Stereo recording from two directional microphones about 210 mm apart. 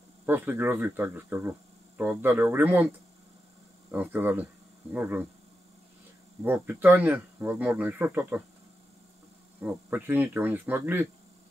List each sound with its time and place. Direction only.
0.3 s speech: 10° right (ahead or behind)
3.9 s speech: 10° right (ahead or behind)
6.4 s speech: 10° right (ahead or behind)
9.6 s speech: 10° right (ahead or behind)